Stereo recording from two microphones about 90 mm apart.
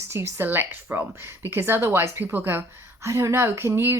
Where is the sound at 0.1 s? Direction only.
30° right (ahead or behind).